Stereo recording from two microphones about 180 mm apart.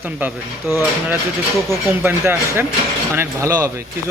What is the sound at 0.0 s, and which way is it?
A man's voice, 10° right (ahead or behind).